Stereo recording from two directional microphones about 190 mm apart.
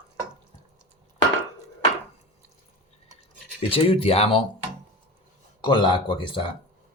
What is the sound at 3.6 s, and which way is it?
Speech, 30° left (ahead or behind).